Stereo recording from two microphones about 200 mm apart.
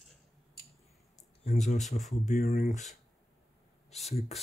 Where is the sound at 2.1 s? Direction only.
35° left (ahead or behind).